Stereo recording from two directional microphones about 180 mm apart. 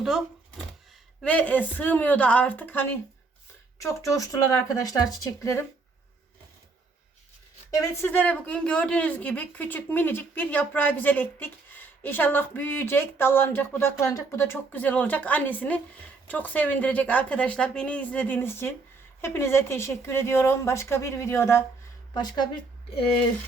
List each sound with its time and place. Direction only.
0.0 s a sound: centre (ahead or behind)
1.2 s speech: 5° left (ahead or behind)
4.1 s speech: 20° left (ahead or behind)
7.7 s speech: 15° left (ahead or behind)